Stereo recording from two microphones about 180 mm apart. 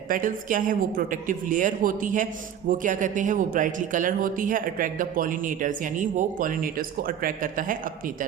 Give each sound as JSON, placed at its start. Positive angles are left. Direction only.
{"t": 0.1, "sound": "speech", "side_deg": -45}